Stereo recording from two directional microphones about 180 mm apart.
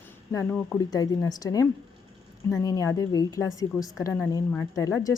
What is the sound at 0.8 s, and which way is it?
A woman's voice, 20° left (ahead or behind).